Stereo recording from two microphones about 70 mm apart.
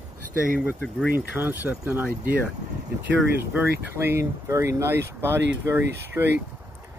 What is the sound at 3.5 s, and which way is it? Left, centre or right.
Speech, right.